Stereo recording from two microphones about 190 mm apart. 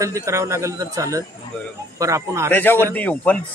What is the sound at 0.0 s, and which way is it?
Speech, 15° right (ahead or behind).